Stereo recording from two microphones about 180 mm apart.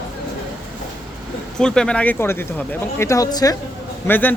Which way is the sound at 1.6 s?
5° left (ahead or behind).